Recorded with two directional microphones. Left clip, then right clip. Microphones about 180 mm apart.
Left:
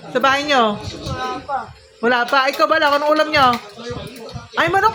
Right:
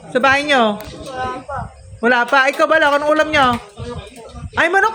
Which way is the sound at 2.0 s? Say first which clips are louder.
Right 2 dB; 30° right (ahead or behind).